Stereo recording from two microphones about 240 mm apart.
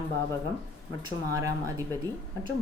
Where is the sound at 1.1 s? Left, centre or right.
Centre.